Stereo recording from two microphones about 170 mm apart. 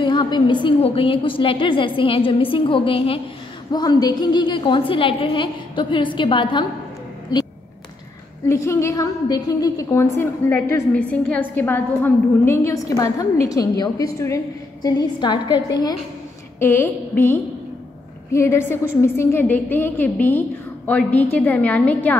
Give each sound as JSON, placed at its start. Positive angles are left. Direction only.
{"t": 0.0, "sound": "a woman's voice", "side_deg": 25}